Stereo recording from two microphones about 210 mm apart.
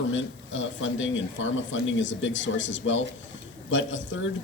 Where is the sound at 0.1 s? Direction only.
65° left (ahead or behind).